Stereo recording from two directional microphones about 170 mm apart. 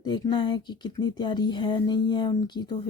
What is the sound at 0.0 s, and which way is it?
Speech, 25° left (ahead or behind).